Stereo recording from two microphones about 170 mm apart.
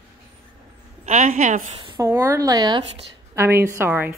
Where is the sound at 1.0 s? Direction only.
40° right (ahead or behind).